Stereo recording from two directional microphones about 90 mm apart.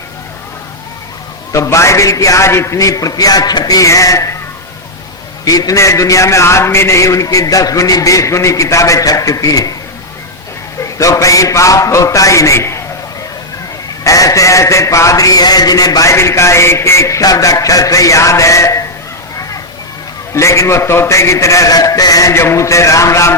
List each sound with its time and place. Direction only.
1.5 s a man's voice: 35° left (ahead or behind)
5.5 s a man's voice: 40° left (ahead or behind)
10.8 s a man's voice: 35° left (ahead or behind)
14.0 s a man's voice: 40° left (ahead or behind)
20.3 s a man's voice: 35° left (ahead or behind)